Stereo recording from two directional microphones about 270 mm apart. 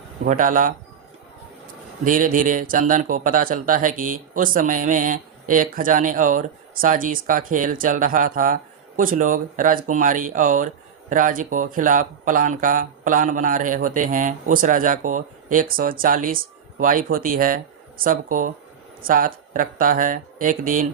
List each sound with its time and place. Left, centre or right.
0.3 s speech: right
2.0 s speech: right